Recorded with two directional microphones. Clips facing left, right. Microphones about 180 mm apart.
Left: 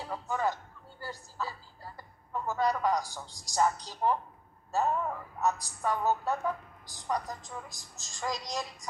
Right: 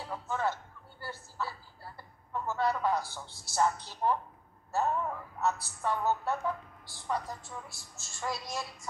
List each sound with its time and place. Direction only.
0.0 s speech: 15° left (ahead or behind)
5.4 s a woman's voice: 15° left (ahead or behind)